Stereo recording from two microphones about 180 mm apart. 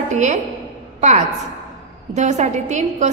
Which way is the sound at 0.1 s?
40° right (ahead or behind).